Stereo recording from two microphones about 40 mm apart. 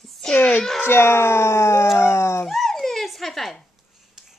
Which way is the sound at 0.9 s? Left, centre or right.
Left.